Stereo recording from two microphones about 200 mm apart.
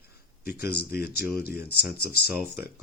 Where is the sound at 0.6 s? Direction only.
50° left (ahead or behind).